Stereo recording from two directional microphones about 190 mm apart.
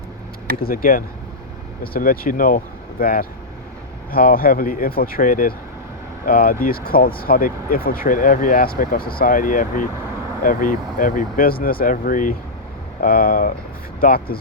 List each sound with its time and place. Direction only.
0.6 s speech: 50° left (ahead or behind)